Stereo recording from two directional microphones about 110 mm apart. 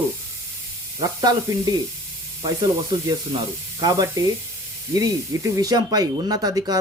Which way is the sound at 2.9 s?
35° right (ahead or behind).